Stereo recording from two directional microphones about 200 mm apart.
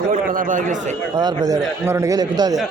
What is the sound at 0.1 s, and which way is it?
Speech, 40° right (ahead or behind).